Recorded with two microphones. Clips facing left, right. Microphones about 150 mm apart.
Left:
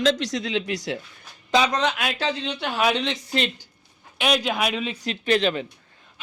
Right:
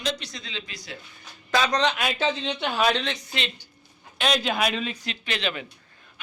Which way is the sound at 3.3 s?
40° left (ahead or behind).